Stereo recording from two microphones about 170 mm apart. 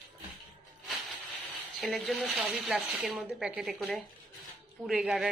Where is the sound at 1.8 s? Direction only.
Centre (ahead or behind).